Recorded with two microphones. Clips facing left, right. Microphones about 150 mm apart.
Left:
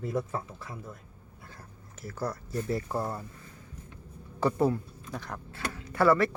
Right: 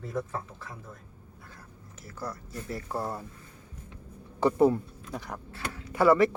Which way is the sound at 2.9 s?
5° right (ahead or behind).